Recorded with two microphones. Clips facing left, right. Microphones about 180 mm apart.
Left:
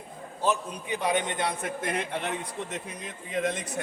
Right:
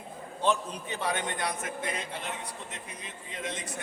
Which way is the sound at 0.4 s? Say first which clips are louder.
Left 1 dB; 10° left (ahead or behind).